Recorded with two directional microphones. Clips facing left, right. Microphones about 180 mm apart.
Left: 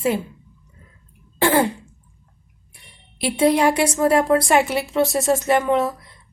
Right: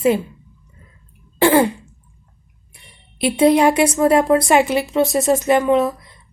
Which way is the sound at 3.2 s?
20° right (ahead or behind).